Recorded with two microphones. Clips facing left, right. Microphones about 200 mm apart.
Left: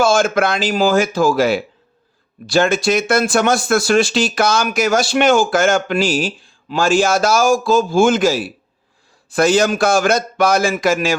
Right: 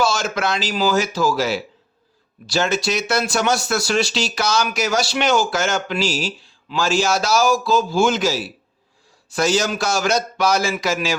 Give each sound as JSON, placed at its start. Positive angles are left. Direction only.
{"t": 0.0, "sound": "speech", "side_deg": 50}